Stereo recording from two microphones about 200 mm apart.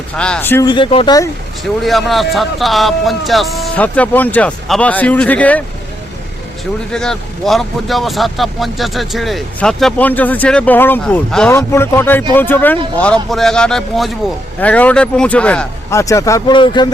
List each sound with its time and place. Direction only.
0.2 s speech: 5° left (ahead or behind)
0.7 s speech: 25° left (ahead or behind)
1.8 s speech: centre (ahead or behind)
6.9 s speech: 5° left (ahead or behind); by 16.9 s 20° left (ahead or behind)